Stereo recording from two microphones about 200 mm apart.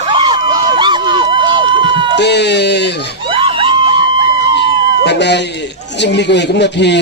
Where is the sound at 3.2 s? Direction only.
25° right (ahead or behind).